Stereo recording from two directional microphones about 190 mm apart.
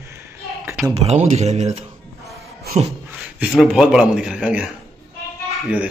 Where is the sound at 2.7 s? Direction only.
55° right (ahead or behind).